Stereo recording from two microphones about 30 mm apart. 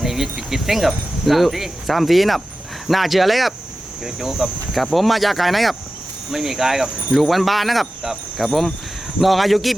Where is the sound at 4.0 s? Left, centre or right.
Centre.